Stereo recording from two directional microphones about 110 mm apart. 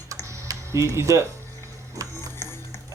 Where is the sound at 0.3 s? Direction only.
25° right (ahead or behind).